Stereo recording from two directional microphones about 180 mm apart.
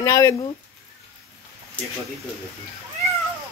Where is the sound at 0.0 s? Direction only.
15° left (ahead or behind).